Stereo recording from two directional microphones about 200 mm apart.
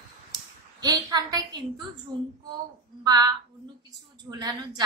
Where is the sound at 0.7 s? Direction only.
20° right (ahead or behind).